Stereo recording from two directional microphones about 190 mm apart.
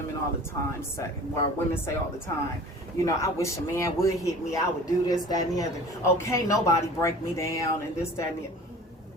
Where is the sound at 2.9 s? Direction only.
15° left (ahead or behind).